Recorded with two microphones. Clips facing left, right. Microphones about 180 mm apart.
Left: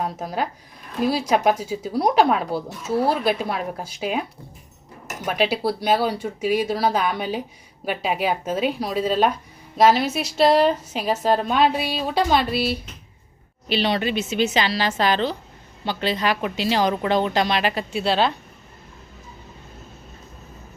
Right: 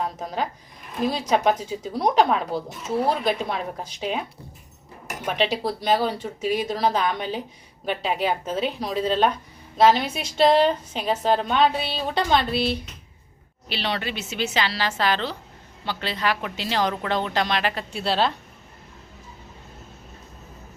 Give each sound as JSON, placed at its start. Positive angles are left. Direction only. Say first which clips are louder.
{"t": 0.0, "sound": "a woman's voice", "louder": "left 2 dB", "side_deg": 10}
{"t": 18.0, "sound": "a woman's voice", "louder": "left 2 dB", "side_deg": 0}